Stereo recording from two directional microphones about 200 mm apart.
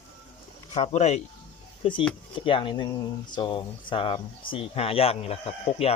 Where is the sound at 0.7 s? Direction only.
35° left (ahead or behind).